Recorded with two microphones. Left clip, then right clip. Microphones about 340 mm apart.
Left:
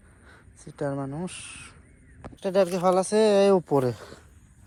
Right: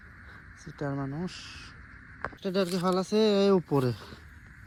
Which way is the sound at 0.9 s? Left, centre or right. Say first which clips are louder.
Left 4 dB; left.